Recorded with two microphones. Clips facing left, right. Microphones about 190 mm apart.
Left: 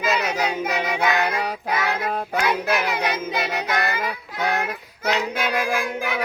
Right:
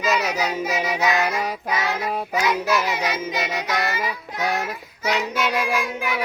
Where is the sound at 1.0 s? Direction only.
55° left (ahead or behind).